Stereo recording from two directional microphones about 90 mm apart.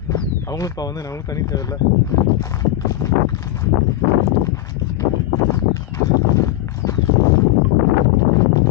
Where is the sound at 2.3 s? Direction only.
35° left (ahead or behind).